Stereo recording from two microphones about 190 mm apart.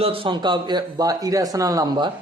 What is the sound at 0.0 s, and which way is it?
Speech, 30° right (ahead or behind).